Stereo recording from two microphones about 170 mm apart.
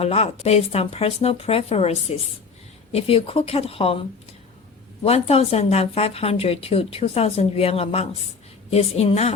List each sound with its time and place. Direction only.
0.0 s speech: 40° left (ahead or behind)
5.0 s speech: 35° left (ahead or behind)